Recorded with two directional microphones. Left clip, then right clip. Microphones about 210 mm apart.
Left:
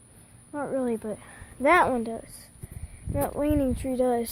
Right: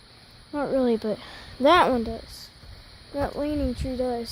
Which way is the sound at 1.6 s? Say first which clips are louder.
Right 2 dB; 30° right (ahead or behind).